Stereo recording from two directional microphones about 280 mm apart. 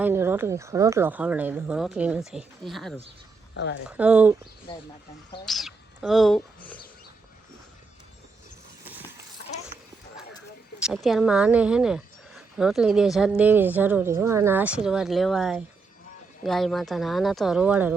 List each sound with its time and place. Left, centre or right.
0.0 s speech: centre
3.5 s speech: left
3.8 s speech: centre
4.7 s speech: centre
5.5 s speech: centre
10.8 s speech: centre